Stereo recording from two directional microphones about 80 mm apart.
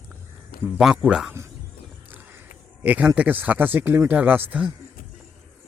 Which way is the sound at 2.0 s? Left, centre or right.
Right.